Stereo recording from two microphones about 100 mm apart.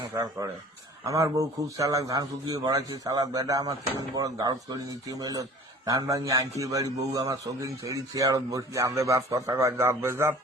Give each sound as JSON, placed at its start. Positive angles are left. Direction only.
{"t": 0.1, "sound": "a man's voice", "side_deg": -30}